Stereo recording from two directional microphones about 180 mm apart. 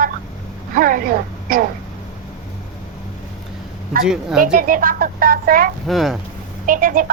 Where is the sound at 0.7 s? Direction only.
50° right (ahead or behind).